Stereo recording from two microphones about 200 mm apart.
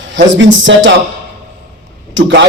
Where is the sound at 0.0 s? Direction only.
70° right (ahead or behind).